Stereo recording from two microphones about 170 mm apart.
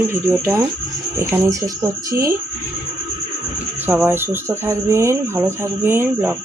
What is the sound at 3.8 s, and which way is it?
Speech, 10° right (ahead or behind).